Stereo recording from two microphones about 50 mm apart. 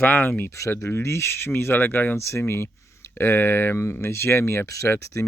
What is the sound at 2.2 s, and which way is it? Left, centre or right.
Speech, left.